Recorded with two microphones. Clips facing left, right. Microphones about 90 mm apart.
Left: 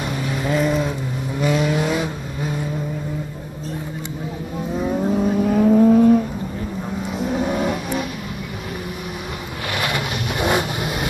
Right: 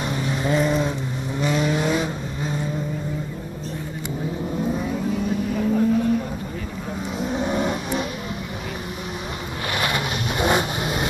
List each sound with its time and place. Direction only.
0.1 s vehicle: centre (ahead or behind)
5.4 s vehicle: 85° left
7.2 s vehicle: 10° left (ahead or behind)
9.9 s vehicle: 15° left (ahead or behind)